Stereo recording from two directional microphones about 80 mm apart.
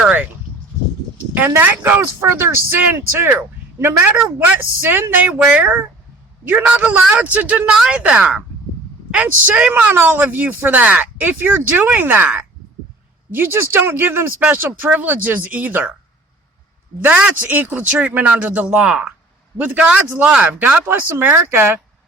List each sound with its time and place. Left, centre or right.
1.3 s a man's voice: right
4.1 s a man's voice: centre
17.0 s a man's voice: right